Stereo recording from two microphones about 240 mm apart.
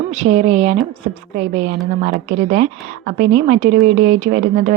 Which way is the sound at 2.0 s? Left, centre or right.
Right.